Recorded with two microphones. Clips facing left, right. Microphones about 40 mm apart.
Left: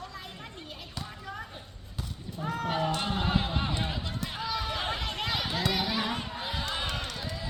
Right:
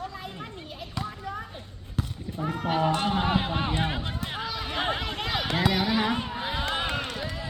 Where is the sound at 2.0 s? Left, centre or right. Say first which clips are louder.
Right 8 dB; right.